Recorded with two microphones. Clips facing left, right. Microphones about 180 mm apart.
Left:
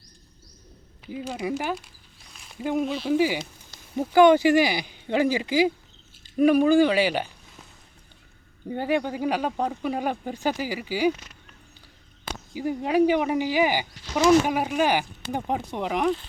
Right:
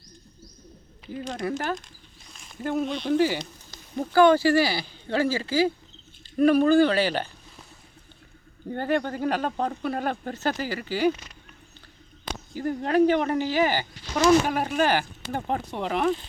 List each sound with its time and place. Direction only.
1.1 s speech: 5° left (ahead or behind)
8.7 s speech: 10° left (ahead or behind)
12.2 s speech: 10° left (ahead or behind)